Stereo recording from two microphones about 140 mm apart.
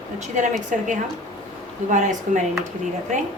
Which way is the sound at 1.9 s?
65° right (ahead or behind).